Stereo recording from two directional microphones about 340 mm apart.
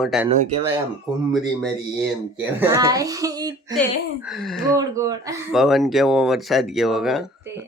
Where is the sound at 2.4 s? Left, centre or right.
Centre.